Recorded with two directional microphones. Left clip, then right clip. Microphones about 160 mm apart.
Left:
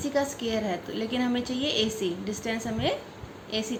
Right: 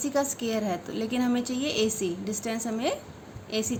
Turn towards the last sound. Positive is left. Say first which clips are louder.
# right 1 dB
turn(degrees=-35)  # may be behind; listen again after turning